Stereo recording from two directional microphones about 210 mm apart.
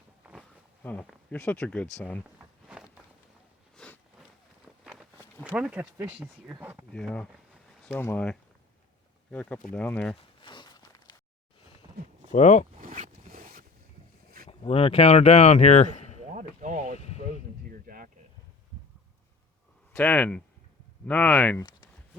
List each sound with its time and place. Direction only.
0.2 s a sound: 5° right (ahead or behind)
0.8 s speech: 5° left (ahead or behind)
2.4 s a sound: 5° right (ahead or behind)
4.8 s speech: 5° right (ahead or behind)
6.9 s speech: 5° left (ahead or behind)
10.2 s walk: 20° left (ahead or behind)
12.3 s speech: 35° left (ahead or behind)
12.8 s zipper: 40° right (ahead or behind)
14.4 s speech: 30° left (ahead or behind)
16.3 s a sound: 35° right (ahead or behind)
19.9 s speech: 5° left (ahead or behind)
21.6 s a sound: 15° left (ahead or behind)